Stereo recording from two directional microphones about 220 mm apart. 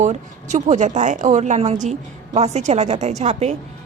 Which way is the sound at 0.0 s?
30° right (ahead or behind).